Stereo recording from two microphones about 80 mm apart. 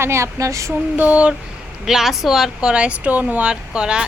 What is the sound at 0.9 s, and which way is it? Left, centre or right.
Speech, centre.